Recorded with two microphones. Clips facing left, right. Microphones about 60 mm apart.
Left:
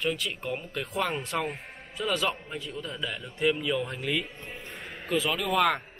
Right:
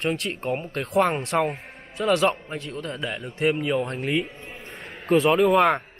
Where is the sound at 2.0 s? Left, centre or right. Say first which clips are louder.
Right 8 dB; right.